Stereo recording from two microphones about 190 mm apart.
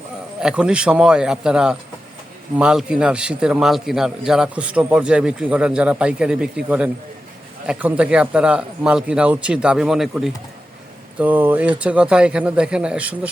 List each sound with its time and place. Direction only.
0.4 s a man's voice: 5° right (ahead or behind)